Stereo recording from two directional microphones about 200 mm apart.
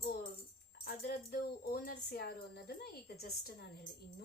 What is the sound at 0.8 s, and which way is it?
Speech, 50° left (ahead or behind).